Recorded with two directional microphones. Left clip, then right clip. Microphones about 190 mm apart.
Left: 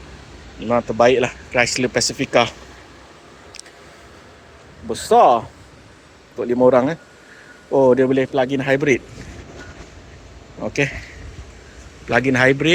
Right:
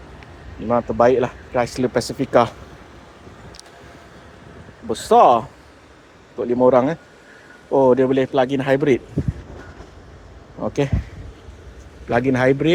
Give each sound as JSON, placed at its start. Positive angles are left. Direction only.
{"t": 0.7, "sound": "speech", "side_deg": -5}
{"t": 2.3, "sound": "a man's voice", "side_deg": -25}
{"t": 4.9, "sound": "a man's voice", "side_deg": -25}
{"t": 6.4, "sound": "a man's voice", "side_deg": -15}
{"t": 10.6, "sound": "speech", "side_deg": -20}
{"t": 12.0, "sound": "speech", "side_deg": -10}